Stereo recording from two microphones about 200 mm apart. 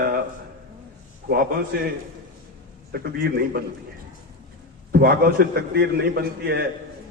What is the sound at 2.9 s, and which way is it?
Speech, 50° right (ahead or behind).